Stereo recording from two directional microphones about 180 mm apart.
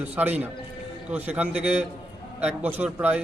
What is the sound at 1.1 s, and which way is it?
A man's voice, 10° right (ahead or behind).